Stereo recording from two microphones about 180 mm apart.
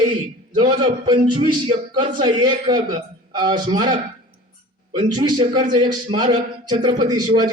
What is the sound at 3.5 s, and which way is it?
Speech, 25° right (ahead or behind).